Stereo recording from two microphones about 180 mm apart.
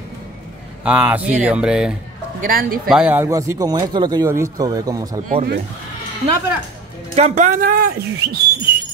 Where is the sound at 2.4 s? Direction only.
50° right (ahead or behind).